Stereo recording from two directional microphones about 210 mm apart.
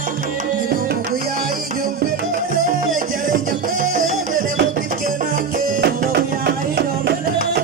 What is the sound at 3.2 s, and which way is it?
Music, 40° right (ahead or behind).